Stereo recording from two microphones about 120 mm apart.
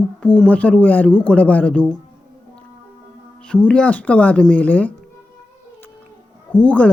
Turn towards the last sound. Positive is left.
turn(degrees=10)  # may be behind; listen again after turning